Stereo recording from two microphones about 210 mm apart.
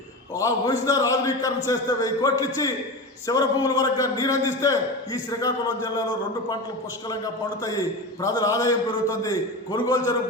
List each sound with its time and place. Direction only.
0.3 s a man's voice: 15° left (ahead or behind)
8.2 s a man's voice: 15° left (ahead or behind)